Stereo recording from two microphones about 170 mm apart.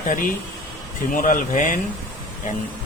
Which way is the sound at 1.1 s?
50° left (ahead or behind).